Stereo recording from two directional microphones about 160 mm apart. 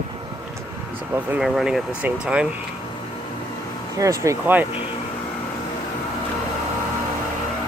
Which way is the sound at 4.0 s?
20° right (ahead or behind).